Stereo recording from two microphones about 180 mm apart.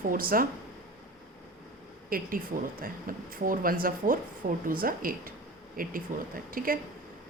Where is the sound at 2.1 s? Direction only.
55° right (ahead or behind).